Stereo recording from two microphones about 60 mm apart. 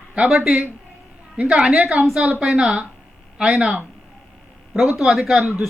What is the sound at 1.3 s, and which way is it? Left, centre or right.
A woman's voice, centre.